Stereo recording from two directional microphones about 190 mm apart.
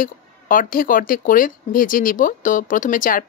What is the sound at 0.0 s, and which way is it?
Speech, 45° left (ahead or behind).